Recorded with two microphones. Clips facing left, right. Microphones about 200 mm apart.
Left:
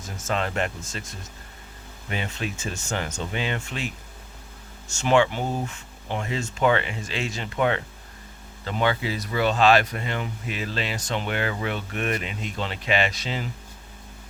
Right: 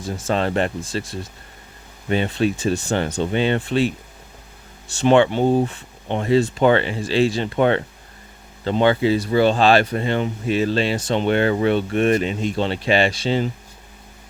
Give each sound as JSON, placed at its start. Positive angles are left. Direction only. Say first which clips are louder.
{"t": 0.0, "sound": "speech", "louder": "right 6 dB", "side_deg": -30}